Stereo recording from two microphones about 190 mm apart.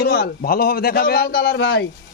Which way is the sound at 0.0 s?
50° left (ahead or behind).